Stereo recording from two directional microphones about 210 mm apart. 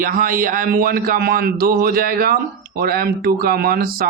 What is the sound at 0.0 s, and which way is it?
Speech, 40° right (ahead or behind).